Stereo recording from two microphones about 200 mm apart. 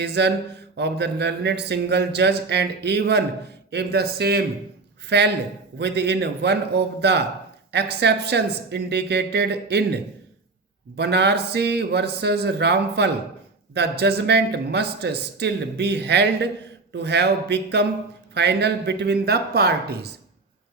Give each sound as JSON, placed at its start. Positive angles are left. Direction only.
{"t": 0.0, "sound": "speech", "side_deg": -60}